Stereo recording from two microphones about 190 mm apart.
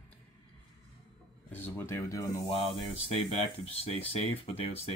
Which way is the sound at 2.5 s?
30° left (ahead or behind).